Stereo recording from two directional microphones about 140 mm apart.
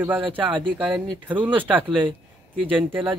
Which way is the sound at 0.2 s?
40° right (ahead or behind).